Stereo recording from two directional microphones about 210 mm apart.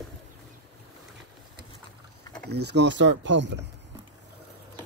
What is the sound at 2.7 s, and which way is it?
Speech, 55° right (ahead or behind).